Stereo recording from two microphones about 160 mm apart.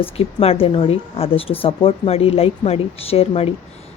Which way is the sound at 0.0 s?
35° left (ahead or behind).